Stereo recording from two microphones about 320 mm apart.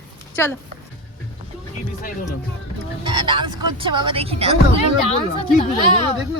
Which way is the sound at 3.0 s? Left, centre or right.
Centre.